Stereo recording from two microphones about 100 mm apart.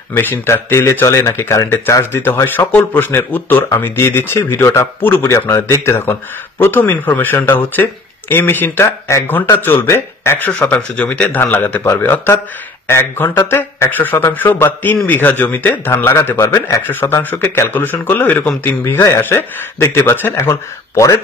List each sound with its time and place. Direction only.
0.1 s a man's voice: 20° left (ahead or behind)